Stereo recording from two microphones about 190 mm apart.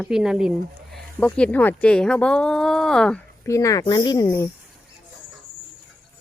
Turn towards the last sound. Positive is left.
turn(degrees=15)  # may be behind; listen again after turning